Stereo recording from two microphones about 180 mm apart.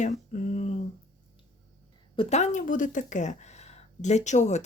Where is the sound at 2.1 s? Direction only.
35° left (ahead or behind).